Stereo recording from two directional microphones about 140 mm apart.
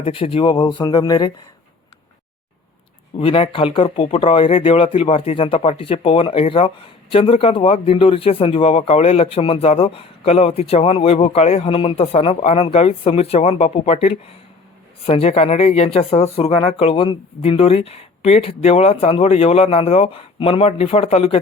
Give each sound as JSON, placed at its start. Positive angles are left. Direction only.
{"t": 0.0, "sound": "speech", "side_deg": 40}
{"t": 3.2, "sound": "speech", "side_deg": 45}